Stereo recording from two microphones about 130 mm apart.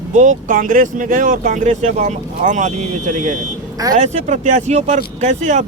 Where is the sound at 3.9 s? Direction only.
70° right (ahead or behind).